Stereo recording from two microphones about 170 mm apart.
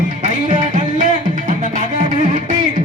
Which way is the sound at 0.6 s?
50° right (ahead or behind).